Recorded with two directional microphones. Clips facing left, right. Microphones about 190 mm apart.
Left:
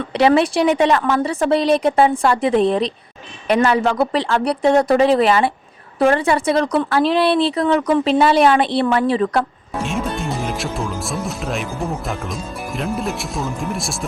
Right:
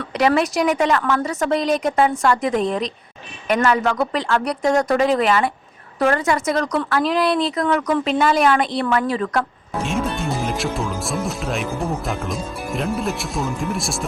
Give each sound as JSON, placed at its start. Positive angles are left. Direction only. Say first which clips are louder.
{"t": 0.0, "sound": "speech", "louder": "left 4 dB", "side_deg": 30}
{"t": 9.8, "sound": "speech", "louder": "even", "side_deg": 0}